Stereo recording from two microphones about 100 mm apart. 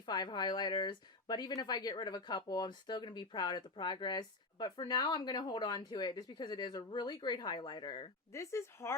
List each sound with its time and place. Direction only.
0.0 s speech: 45° left (ahead or behind)
8.3 s speech: 30° left (ahead or behind)